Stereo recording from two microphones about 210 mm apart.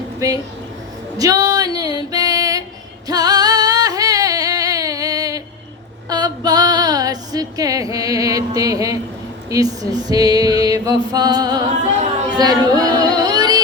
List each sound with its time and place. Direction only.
1.2 s music: 15° right (ahead or behind)
3.1 s singing: 20° right (ahead or behind)
6.1 s female singing: 20° right (ahead or behind)
9.5 s music: 15° right (ahead or behind)